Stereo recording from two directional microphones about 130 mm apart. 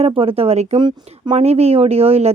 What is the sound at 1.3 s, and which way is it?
Speech, 55° right (ahead or behind).